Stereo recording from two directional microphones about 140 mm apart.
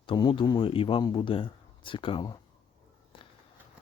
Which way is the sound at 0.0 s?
35° left (ahead or behind).